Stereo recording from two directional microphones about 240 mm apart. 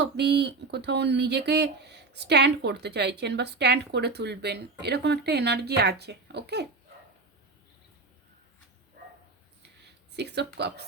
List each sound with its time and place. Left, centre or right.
0.0 s speech: right
9.0 s bow-wow: right
9.6 s a sound: right